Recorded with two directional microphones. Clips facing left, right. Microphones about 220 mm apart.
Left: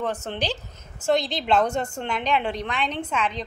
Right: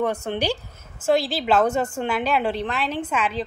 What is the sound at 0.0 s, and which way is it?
A woman's voice, 10° right (ahead or behind).